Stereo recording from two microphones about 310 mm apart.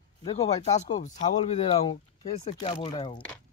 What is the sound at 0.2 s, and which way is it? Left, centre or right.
Speech, centre.